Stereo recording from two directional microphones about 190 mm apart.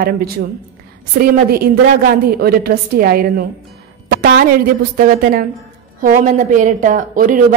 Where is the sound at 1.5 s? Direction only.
55° right (ahead or behind).